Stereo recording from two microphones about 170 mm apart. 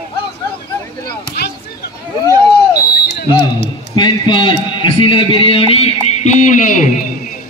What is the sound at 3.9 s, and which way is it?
A man's voice, 25° left (ahead or behind).